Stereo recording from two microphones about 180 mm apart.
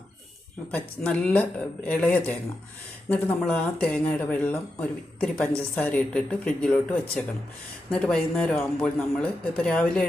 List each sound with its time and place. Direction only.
0.7 s a man's voice: 5° left (ahead or behind)